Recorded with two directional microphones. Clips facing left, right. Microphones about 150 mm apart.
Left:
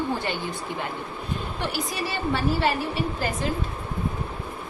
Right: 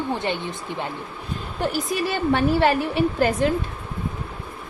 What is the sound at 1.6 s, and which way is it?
A woman's voice, 50° right (ahead or behind).